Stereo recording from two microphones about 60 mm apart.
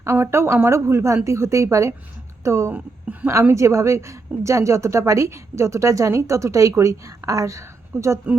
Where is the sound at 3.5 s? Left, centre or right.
Right.